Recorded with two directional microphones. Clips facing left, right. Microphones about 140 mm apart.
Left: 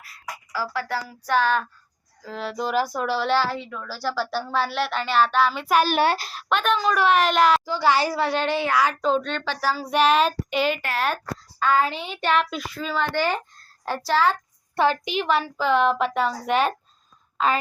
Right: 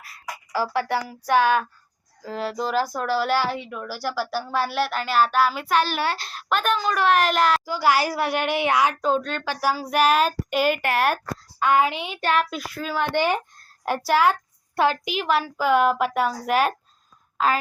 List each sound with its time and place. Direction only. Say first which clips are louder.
0.5 s a woman's voice: right 4 dB; 20° right (ahead or behind); by 5.6 s 5° right (ahead or behind)
5.6 s a child's voice: left 3 dB; 10° left (ahead or behind)
6.2 s a woman's voice: left 1 dB; centre (ahead or behind); by 9.0 s 20° right (ahead or behind)
9.0 s a woman's voice: even; 5° right (ahead or behind)